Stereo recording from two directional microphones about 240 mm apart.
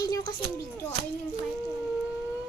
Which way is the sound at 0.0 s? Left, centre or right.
Centre.